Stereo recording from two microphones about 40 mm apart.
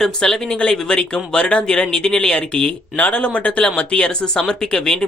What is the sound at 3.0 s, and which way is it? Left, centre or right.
Speech, left.